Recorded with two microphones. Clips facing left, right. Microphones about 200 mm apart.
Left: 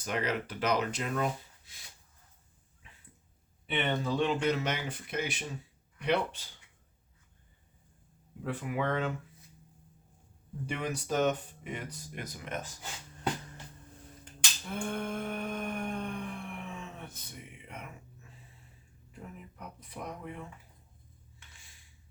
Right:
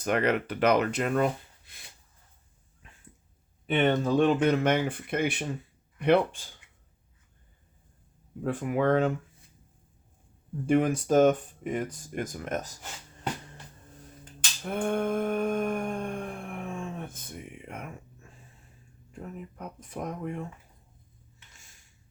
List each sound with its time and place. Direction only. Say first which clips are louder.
0.0 s speech: right 7 dB; 60° right (ahead or behind)
3.7 s speech: right 7 dB; 45° right (ahead or behind)
8.4 s speech: right 7 dB; 50° right (ahead or behind)
10.7 s speech: right 11 dB; 50° right (ahead or behind)
14.6 s a sound: right 8 dB; 55° right (ahead or behind)
19.1 s speech: right 7 dB; 45° right (ahead or behind)
21.5 s a sound: right 2 dB; 45° right (ahead or behind)